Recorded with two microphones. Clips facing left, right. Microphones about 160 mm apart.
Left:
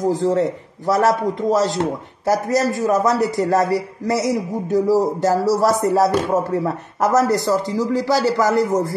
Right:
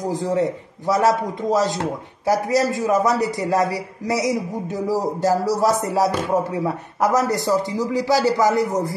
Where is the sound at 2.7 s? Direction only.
45° left (ahead or behind).